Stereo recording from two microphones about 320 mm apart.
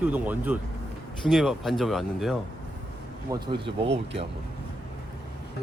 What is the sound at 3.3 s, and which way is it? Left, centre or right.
Speech, centre.